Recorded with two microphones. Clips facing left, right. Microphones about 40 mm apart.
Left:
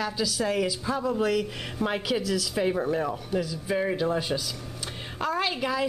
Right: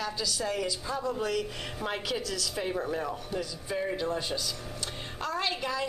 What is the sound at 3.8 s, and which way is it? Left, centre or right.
Speech, centre.